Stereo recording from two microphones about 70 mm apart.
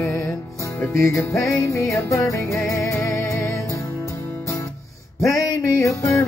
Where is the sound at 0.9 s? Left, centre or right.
Left.